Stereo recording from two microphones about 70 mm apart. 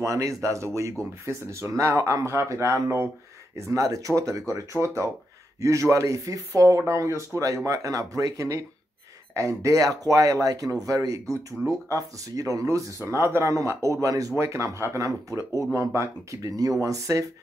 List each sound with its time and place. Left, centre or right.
0.0 s speech: right
16.4 s speech: right
16.8 s speech: right